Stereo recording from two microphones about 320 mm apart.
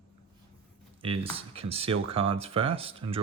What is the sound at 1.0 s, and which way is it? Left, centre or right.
Speech, centre.